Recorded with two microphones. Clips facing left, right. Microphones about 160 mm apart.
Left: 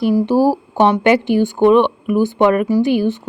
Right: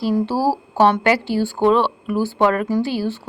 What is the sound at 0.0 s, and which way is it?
A woman's voice, 15° left (ahead or behind).